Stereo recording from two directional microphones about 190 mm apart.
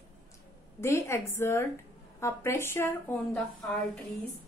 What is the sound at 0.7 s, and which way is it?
A woman's voice, 15° left (ahead or behind).